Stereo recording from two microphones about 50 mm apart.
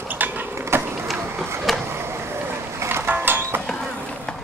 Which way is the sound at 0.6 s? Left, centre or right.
Right.